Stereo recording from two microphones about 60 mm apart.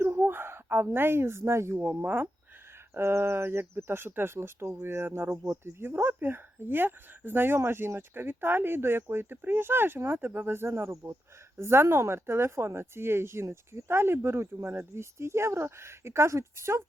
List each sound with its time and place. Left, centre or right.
0.0 s a sound: right
1.9 s speech: right
2.9 s speech: right